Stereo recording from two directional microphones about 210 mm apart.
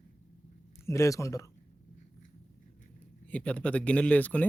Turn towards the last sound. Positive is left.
turn(degrees=5)  # may be behind; listen again after turning